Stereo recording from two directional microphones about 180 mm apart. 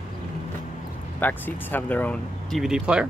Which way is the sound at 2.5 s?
5° right (ahead or behind).